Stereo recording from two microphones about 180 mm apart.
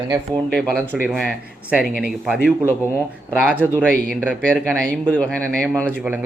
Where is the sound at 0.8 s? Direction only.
5° right (ahead or behind).